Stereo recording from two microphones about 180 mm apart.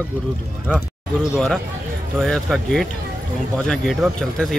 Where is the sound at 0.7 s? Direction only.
5° right (ahead or behind).